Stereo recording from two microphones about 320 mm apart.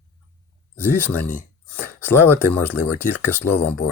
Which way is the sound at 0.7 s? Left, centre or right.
Centre.